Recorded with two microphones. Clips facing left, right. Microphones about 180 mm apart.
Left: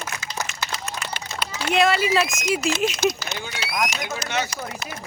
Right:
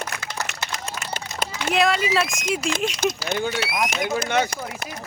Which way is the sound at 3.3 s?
50° right (ahead or behind).